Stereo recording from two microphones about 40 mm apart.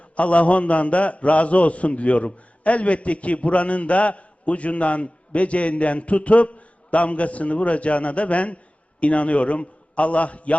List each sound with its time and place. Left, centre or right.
0.2 s a man's voice: left